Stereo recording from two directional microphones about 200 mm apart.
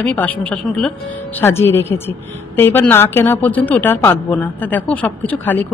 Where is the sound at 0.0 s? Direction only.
10° left (ahead or behind).